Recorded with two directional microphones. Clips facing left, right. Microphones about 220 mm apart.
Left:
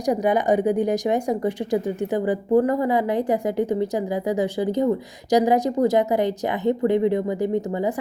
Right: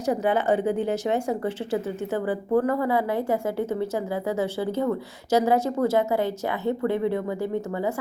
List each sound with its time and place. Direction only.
0.0 s speech: 15° left (ahead or behind)